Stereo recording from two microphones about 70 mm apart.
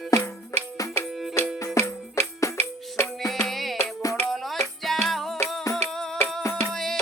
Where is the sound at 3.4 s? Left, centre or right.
Centre.